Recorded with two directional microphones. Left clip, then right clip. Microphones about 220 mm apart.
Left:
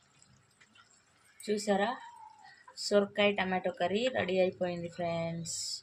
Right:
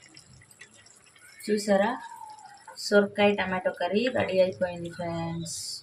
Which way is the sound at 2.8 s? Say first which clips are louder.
Right 6 dB; 45° left (ahead or behind).